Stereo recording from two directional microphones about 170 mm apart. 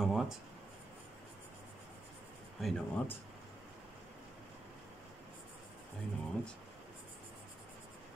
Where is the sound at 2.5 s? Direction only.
Centre (ahead or behind).